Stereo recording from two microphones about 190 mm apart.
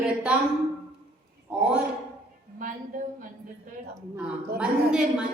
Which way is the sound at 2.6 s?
45° right (ahead or behind).